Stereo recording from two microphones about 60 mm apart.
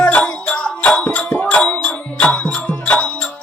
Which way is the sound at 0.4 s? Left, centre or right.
Centre.